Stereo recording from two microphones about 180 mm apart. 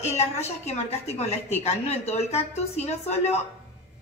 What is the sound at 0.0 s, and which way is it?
A woman's voice, 35° left (ahead or behind).